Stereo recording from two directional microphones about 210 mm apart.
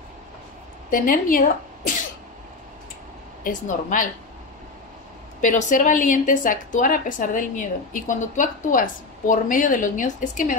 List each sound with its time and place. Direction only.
0.8 s a woman's voice: 40° left (ahead or behind)
3.4 s a woman's voice: 40° left (ahead or behind)
5.4 s a woman's voice: 35° left (ahead or behind)